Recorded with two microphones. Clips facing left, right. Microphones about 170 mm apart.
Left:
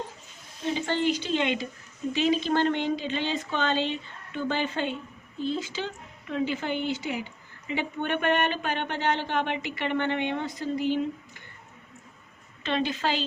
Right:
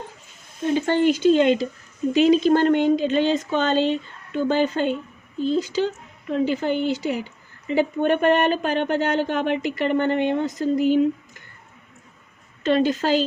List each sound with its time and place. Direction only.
0.6 s a woman's voice: 50° right (ahead or behind)
12.6 s speech: 45° right (ahead or behind)